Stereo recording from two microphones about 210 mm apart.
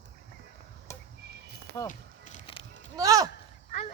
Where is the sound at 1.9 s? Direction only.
30° left (ahead or behind).